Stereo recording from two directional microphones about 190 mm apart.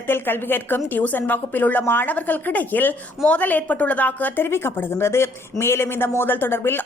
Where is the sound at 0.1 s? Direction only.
10° left (ahead or behind).